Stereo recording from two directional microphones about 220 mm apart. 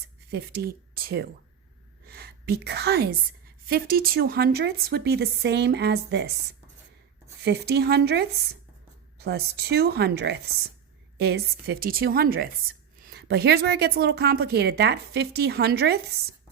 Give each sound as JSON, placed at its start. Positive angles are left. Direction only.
{"t": 0.3, "sound": "speech", "side_deg": -45}